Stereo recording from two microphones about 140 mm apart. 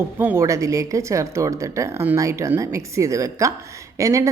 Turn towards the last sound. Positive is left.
turn(degrees=-25)  # may be behind; listen again after turning